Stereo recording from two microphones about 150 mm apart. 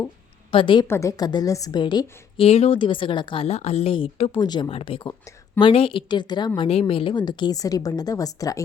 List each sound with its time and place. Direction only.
0.5 s a woman's voice: 35° left (ahead or behind)
0.9 s a woman's voice: 20° left (ahead or behind)
2.5 s a woman's voice: 40° left (ahead or behind)
6.6 s a woman's voice: 40° left (ahead or behind); by 8.6 s 25° left (ahead or behind)